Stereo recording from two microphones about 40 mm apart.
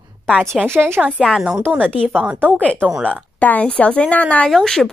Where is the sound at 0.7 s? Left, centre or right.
Right.